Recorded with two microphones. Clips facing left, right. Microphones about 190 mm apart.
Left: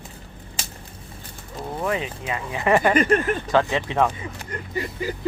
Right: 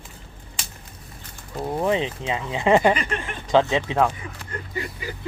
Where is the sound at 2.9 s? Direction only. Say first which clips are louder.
Left 11 dB; 45° left (ahead or behind).